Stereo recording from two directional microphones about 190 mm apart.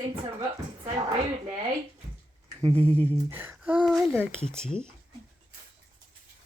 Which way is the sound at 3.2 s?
10° right (ahead or behind).